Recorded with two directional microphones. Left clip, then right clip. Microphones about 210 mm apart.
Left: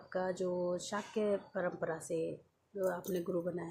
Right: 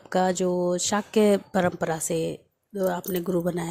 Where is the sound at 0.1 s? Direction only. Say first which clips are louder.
Right 13 dB; 45° right (ahead or behind).